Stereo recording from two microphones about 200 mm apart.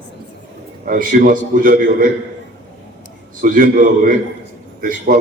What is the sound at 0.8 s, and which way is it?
A man's voice, 45° right (ahead or behind).